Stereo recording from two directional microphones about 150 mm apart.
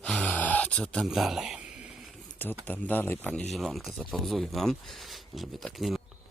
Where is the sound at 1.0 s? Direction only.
Centre (ahead or behind).